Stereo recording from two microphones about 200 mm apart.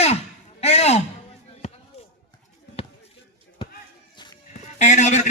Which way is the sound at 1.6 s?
35° left (ahead or behind).